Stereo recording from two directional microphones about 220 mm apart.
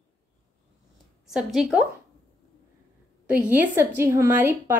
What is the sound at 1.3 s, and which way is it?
Speech, 5° right (ahead or behind).